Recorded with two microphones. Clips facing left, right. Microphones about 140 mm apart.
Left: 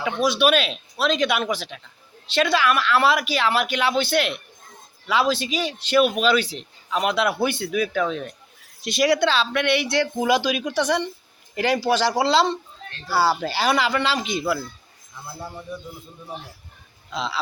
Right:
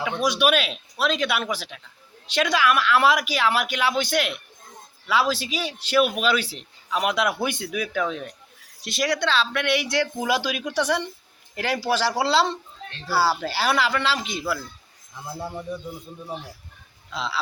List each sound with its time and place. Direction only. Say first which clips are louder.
0.2 s speech: left 2 dB; 10° right (ahead or behind)
15.3 s speech: right 3 dB; 15° right (ahead or behind)
17.1 s speech: left 1 dB; centre (ahead or behind)